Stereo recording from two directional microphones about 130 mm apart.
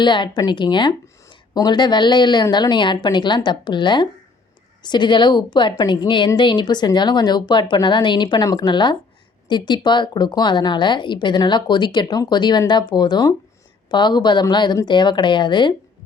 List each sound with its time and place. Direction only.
0.0 s speech: 35° left (ahead or behind)